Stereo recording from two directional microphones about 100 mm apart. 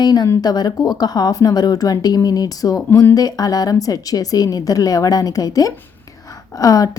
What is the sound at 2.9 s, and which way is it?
Speech, 25° left (ahead or behind).